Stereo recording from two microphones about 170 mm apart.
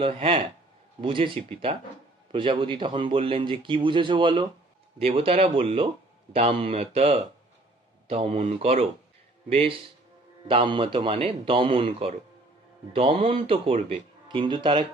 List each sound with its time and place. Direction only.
0.0 s a man's voice: 35° right (ahead or behind)